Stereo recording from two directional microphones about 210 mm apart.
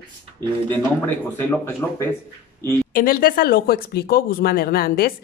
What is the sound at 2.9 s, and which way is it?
Speech, 45° left (ahead or behind).